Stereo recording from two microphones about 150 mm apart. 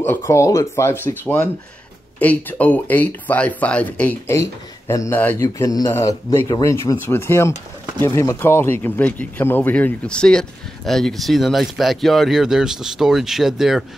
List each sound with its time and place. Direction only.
0.0 s speech: 15° left (ahead or behind)
5.4 s speech: 25° left (ahead or behind); by 13.8 s centre (ahead or behind)